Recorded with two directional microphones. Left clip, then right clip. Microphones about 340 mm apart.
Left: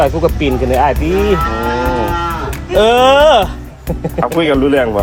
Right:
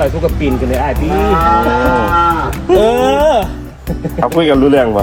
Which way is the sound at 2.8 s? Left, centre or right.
Centre.